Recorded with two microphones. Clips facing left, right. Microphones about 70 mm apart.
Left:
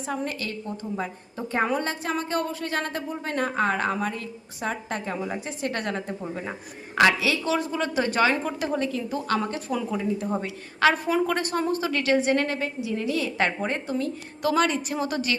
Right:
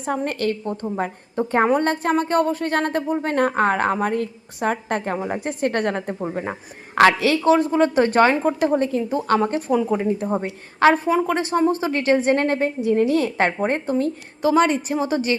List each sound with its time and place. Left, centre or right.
0.0 s a woman's voice: right
7.5 s a woman's voice: right
10.3 s a woman's voice: right
11.1 s speech: centre
11.8 s a woman's voice: right
14.4 s a woman's voice: right